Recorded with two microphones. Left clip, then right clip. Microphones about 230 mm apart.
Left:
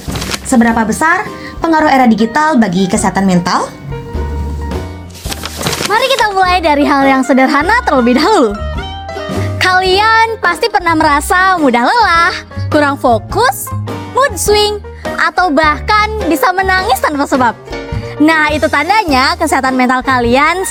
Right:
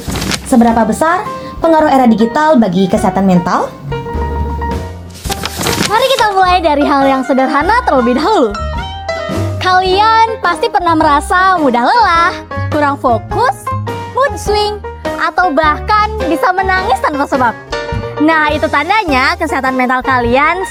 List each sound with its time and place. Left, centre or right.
0.1 s a sound: centre
0.5 s speech: left
5.3 s music: centre
5.9 s a sound: left
6.2 s a woman's voice: left
9.0 s music: centre
9.6 s speech: left
14.2 s music: left
16.3 s speech: left